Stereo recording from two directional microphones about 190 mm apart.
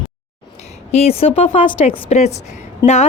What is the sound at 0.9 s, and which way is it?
A woman's voice, 30° left (ahead or behind).